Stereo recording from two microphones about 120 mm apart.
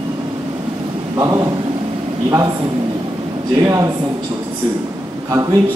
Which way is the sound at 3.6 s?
25° right (ahead or behind).